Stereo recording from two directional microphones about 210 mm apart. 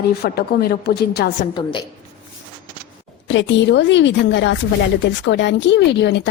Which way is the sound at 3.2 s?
60° left (ahead or behind).